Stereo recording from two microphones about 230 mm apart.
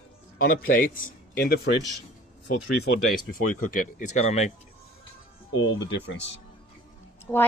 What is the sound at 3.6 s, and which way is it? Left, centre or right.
Speech, left.